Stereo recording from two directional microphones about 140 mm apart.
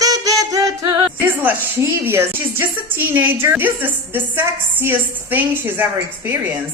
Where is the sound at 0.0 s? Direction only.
25° right (ahead or behind).